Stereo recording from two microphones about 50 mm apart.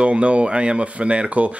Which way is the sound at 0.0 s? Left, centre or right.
Right.